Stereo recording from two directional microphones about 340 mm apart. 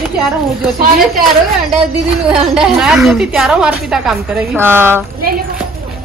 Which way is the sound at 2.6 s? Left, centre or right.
Centre.